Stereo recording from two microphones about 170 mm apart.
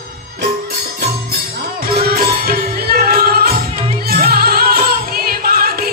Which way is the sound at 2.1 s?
65° right (ahead or behind).